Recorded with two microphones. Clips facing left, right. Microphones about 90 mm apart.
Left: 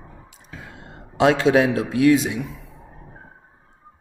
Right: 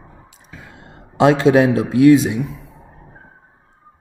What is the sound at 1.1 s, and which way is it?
Speech, 30° right (ahead or behind).